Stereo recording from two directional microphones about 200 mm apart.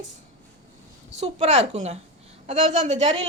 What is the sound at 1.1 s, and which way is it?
A woman's voice, 35° right (ahead or behind).